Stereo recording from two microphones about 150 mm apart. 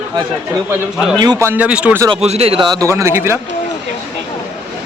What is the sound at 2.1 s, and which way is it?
Speech, 45° right (ahead or behind).